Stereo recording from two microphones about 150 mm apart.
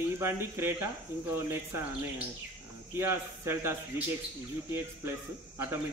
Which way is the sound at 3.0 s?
15° right (ahead or behind).